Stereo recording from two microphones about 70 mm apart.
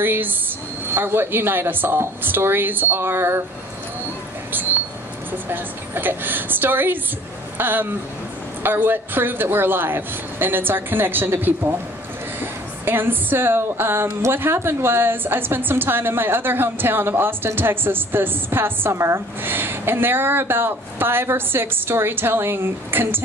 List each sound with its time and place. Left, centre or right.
0.0 s a woman's voice: right
4.5 s a sound: right
5.3 s a woman's voice: right